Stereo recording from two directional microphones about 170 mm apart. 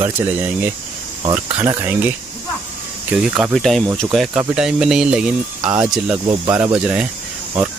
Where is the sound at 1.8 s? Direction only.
15° right (ahead or behind).